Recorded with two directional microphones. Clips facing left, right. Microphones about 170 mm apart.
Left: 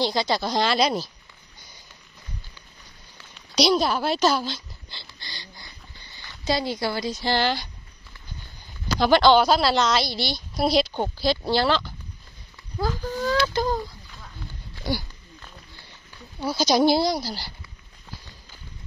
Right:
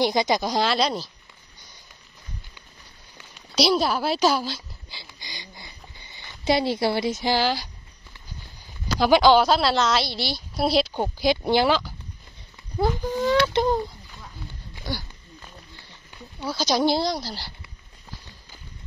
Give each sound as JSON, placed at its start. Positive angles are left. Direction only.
{"t": 0.0, "sound": "a woman's voice", "side_deg": -20}
{"t": 3.5, "sound": "a sound", "side_deg": -5}
{"t": 7.3, "sound": "a woman's voice", "side_deg": -5}
{"t": 9.0, "sound": "a woman's voice", "side_deg": -5}
{"t": 13.0, "sound": "a sound", "side_deg": -20}
{"t": 16.3, "sound": "speech", "side_deg": 10}